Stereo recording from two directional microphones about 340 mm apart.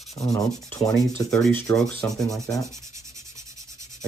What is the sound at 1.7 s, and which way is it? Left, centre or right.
Rub, centre.